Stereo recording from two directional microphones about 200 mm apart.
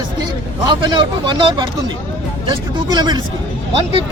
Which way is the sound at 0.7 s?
20° right (ahead or behind).